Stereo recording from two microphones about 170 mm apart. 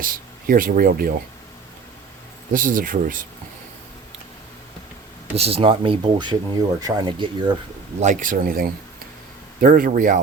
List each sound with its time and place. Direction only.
0.0 s speech: 55° right (ahead or behind)
2.5 s speech: 50° right (ahead or behind)
5.4 s speech: 35° right (ahead or behind)
8.0 s speech: 50° right (ahead or behind)